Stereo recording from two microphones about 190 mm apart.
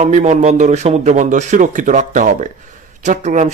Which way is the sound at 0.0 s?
40° right (ahead or behind).